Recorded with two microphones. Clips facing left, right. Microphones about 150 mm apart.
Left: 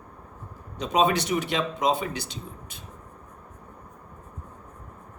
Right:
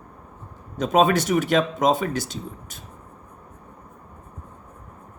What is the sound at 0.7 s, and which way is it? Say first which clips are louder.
Speech: right 4 dB; 45° right (ahead or behind).